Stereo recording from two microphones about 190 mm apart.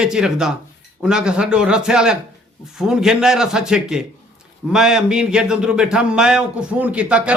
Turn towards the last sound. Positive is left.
turn(degrees=-5)  # may be behind; listen again after turning